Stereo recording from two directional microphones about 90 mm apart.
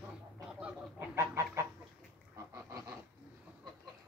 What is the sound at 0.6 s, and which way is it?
Chicken, 25° right (ahead or behind).